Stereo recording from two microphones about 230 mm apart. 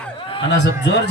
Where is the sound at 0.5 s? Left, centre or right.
Left.